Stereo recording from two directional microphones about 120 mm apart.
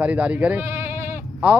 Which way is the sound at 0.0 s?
10° right (ahead or behind).